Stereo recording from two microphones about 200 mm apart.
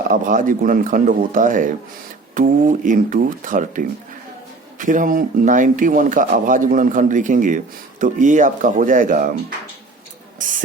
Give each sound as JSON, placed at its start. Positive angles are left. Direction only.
{"t": 0.1, "sound": "speech", "side_deg": -40}